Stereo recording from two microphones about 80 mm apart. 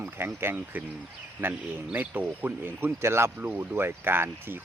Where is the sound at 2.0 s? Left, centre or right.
Right.